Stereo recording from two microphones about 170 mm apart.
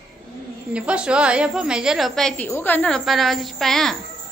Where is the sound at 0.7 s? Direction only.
5° right (ahead or behind).